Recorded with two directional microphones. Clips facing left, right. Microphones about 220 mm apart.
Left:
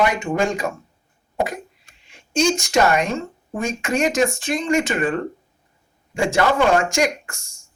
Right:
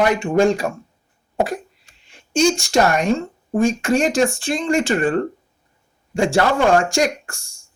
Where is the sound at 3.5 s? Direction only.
30° right (ahead or behind).